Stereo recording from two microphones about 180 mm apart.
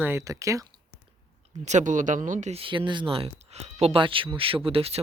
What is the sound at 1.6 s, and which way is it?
Speech, 40° right (ahead or behind).